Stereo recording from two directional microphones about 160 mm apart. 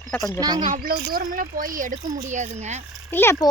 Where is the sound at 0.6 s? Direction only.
55° right (ahead or behind).